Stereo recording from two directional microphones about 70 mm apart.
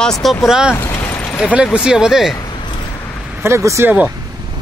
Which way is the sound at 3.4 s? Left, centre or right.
Right.